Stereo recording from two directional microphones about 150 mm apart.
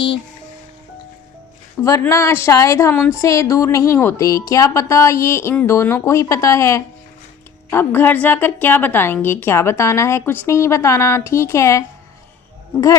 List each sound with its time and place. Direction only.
1.8 s a woman's voice: 20° left (ahead or behind)